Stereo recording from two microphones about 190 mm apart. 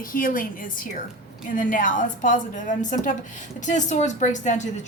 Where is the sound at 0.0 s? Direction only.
45° left (ahead or behind).